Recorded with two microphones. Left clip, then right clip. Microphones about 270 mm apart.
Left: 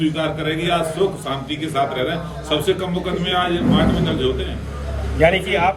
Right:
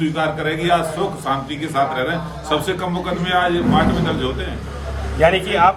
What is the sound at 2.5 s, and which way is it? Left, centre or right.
A man's voice, right.